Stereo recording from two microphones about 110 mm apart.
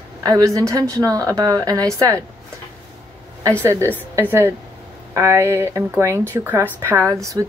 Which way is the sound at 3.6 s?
25° right (ahead or behind).